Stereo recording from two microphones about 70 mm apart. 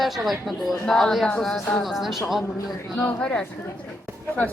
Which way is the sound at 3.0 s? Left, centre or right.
Centre.